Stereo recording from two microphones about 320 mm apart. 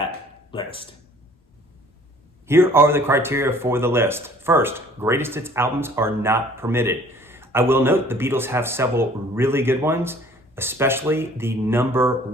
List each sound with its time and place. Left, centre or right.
0.5 s speech: centre
2.5 s speech: centre